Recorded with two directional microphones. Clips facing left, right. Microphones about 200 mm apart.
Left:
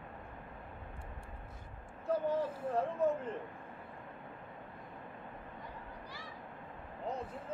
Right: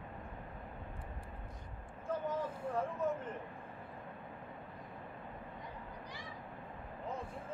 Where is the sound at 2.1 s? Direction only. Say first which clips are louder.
Left 5 dB; 35° left (ahead or behind).